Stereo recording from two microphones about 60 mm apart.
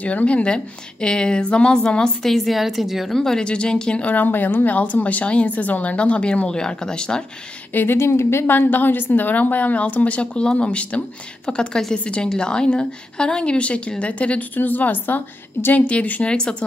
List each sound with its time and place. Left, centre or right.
0.0 s a woman's voice: left
2.3 s speech: centre
3.2 s speech: centre
7.7 s a woman's voice: left
15.9 s speech: left